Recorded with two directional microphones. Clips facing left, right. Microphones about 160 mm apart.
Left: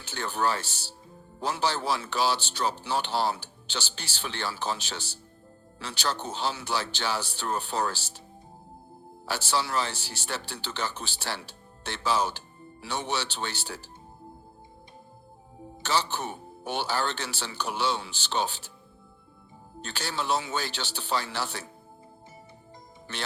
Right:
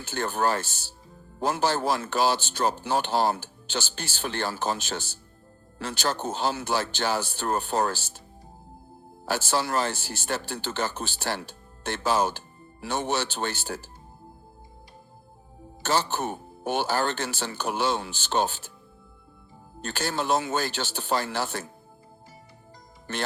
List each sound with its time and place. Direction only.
0.0 s speech: 50° right (ahead or behind)
9.2 s speech: 45° right (ahead or behind)
15.8 s speech: 50° right (ahead or behind)
19.8 s speech: 50° right (ahead or behind)
23.1 s speech: 50° right (ahead or behind)